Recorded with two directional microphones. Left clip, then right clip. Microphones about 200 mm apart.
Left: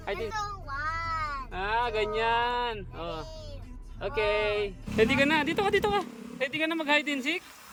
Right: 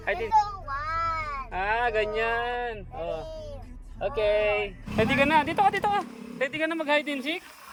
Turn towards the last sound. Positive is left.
turn(degrees=10)  # may be behind; listen again after turning